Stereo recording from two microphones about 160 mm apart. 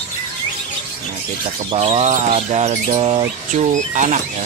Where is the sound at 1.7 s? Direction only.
40° right (ahead or behind).